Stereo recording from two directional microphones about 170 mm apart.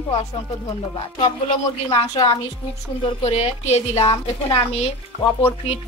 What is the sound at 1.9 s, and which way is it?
A woman's voice, 25° left (ahead or behind).